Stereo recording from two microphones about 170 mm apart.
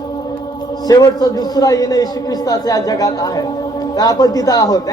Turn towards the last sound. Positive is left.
turn(degrees=20)  # may be behind; listen again after turning